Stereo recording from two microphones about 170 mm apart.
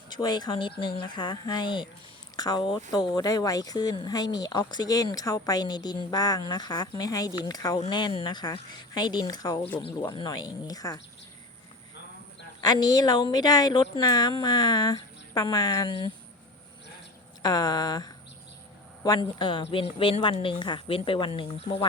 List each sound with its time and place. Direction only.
0.1 s speech: 25° left (ahead or behind)
12.6 s speech: 20° left (ahead or behind)
17.4 s a woman's voice: 25° left (ahead or behind)